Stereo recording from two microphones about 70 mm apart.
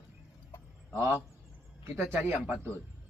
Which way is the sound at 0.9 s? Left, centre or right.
Right.